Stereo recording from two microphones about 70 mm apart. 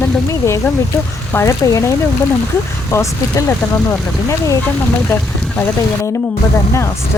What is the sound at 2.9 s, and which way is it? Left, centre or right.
Speech, left.